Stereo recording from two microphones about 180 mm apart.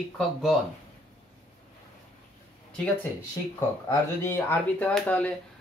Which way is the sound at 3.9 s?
15° left (ahead or behind).